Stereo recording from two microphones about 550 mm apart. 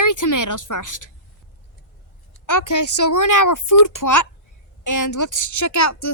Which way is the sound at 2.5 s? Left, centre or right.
Left.